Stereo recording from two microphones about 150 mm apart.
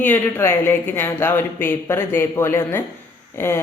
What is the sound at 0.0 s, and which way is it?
A woman's voice, 15° left (ahead or behind).